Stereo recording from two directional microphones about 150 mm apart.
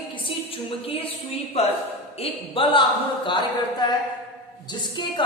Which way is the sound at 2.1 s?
40° left (ahead or behind).